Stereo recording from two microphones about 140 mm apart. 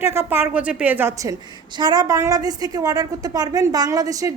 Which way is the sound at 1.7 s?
30° right (ahead or behind).